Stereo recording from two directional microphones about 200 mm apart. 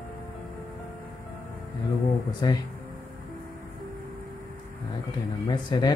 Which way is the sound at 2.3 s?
20° left (ahead or behind).